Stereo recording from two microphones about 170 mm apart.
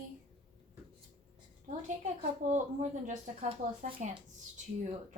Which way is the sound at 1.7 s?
50° right (ahead or behind).